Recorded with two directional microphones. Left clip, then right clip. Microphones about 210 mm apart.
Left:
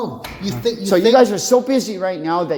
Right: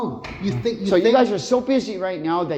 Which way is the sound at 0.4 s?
15° left (ahead or behind).